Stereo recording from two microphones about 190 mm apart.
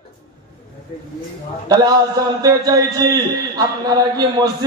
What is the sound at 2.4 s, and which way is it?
A man's voice, 20° right (ahead or behind).